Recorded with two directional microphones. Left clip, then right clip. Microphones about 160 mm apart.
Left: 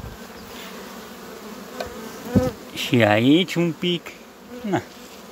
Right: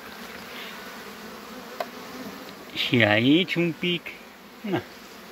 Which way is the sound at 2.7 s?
10° left (ahead or behind).